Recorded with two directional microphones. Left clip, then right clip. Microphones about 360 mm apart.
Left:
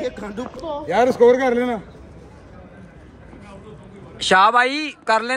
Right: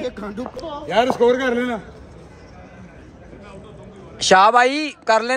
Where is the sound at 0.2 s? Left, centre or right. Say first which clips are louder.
Even; centre.